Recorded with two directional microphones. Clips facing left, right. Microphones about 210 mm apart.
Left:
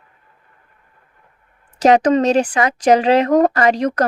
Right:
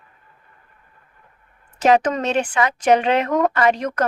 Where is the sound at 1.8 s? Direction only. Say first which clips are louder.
Left 4 dB; 35° left (ahead or behind).